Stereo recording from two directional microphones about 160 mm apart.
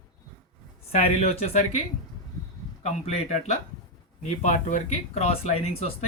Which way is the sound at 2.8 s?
45° left (ahead or behind).